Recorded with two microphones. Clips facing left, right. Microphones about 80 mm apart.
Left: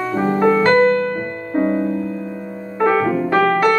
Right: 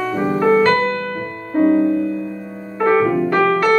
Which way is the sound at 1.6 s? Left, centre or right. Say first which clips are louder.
Right 4 dB; centre.